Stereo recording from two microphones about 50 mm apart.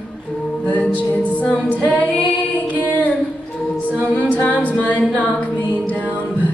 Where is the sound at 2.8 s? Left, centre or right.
Left.